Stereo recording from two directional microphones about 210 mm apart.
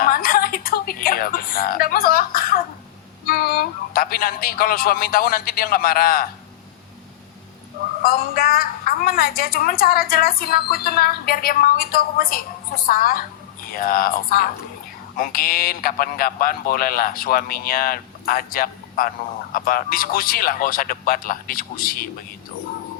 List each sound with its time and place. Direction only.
0.0 s a sound: 45° left (ahead or behind)
3.2 s a woman's voice: 45° left (ahead or behind)
8.0 s a woman's voice: 45° left (ahead or behind)